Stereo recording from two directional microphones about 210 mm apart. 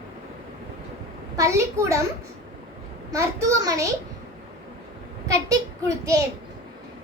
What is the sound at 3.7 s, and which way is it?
Speech, 15° right (ahead or behind).